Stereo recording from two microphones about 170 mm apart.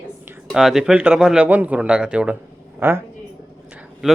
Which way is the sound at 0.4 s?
Centre (ahead or behind).